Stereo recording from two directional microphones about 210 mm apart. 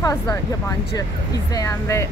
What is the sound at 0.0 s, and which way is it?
Speech, 15° left (ahead or behind).